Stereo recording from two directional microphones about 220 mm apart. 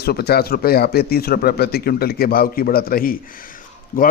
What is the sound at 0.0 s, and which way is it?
A man's voice, 45° left (ahead or behind).